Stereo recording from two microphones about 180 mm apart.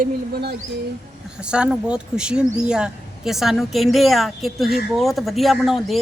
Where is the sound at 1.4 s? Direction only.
5° right (ahead or behind).